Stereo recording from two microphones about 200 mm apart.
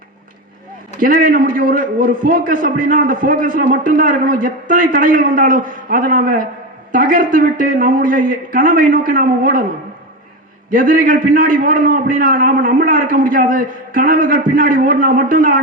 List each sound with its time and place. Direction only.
0.9 s a man's voice: 45° right (ahead or behind)
10.7 s a man's voice: 45° right (ahead or behind)